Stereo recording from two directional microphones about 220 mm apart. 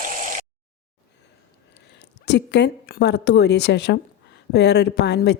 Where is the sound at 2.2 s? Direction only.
50° left (ahead or behind).